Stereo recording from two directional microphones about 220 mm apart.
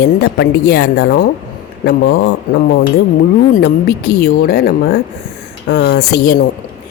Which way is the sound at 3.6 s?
50° left (ahead or behind).